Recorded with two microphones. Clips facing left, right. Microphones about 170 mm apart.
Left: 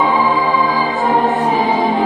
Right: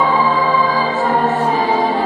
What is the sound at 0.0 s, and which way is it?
Music, 15° left (ahead or behind).